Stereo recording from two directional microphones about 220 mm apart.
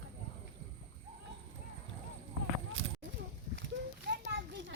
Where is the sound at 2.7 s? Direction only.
65° right (ahead or behind).